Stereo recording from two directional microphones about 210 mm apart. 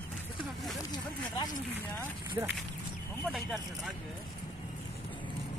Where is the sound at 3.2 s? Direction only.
Centre (ahead or behind).